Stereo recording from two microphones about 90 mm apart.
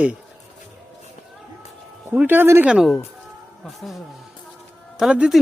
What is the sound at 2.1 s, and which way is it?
Speech, 25° right (ahead or behind).